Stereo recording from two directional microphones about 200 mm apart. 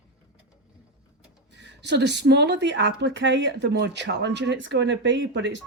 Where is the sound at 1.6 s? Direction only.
60° right (ahead or behind).